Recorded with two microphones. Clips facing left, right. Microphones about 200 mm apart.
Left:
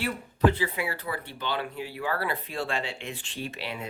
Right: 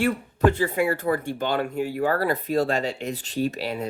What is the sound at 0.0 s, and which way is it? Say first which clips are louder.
Speech: right 4 dB; 45° right (ahead or behind).